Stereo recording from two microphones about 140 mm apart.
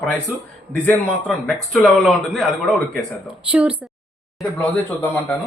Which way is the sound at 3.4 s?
10° right (ahead or behind).